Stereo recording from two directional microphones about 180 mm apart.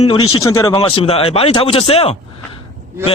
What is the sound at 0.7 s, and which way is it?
A man's voice, 30° left (ahead or behind).